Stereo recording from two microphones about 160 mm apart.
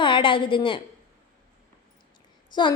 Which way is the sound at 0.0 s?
30° left (ahead or behind).